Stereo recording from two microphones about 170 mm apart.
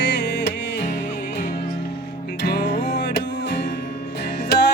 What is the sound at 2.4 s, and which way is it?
Music, 75° left (ahead or behind).